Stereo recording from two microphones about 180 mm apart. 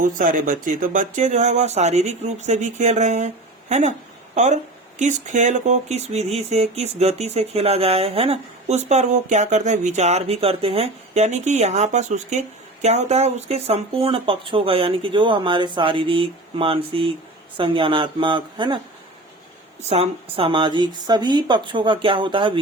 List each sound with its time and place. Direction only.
0.0 s speech: 50° right (ahead or behind); by 18.8 s 25° right (ahead or behind)
19.9 s speech: 35° right (ahead or behind)